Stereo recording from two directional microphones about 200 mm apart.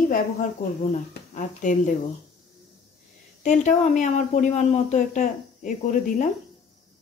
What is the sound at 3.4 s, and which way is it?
Speech, 35° left (ahead or behind).